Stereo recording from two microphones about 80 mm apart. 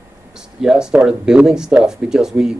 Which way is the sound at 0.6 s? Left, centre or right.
Centre.